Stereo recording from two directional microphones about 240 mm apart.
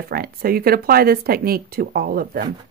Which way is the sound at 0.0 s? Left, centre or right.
Right.